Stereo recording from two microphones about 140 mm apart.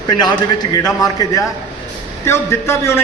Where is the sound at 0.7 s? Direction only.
25° left (ahead or behind).